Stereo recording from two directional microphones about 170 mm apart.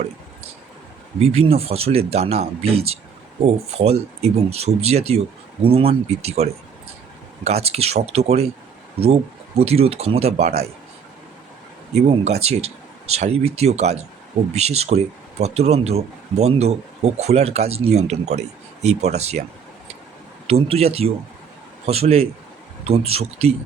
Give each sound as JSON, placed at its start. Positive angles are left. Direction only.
{"t": 1.2, "sound": "speech", "side_deg": -35}
{"t": 9.6, "sound": "speech", "side_deg": -35}
{"t": 11.9, "sound": "speech", "side_deg": -40}
{"t": 20.5, "sound": "speech", "side_deg": -35}